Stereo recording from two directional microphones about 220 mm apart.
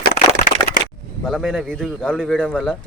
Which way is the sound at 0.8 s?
70° right (ahead or behind).